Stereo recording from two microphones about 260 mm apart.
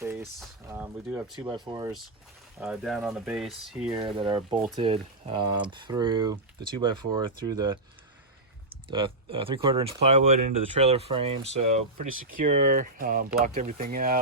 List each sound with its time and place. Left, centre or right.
0.0 s a sound: centre
0.7 s speech: centre
2.6 s speech: centre
3.9 s speech: centre
8.9 s speech: centre
12.2 s speech: right